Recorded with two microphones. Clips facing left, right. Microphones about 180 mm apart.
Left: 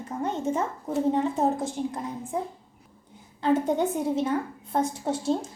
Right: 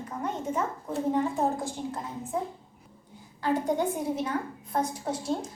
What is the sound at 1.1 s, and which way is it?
Speech, 20° left (ahead or behind).